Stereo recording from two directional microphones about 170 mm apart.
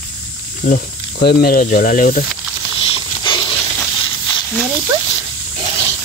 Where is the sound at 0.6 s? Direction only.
60° left (ahead or behind).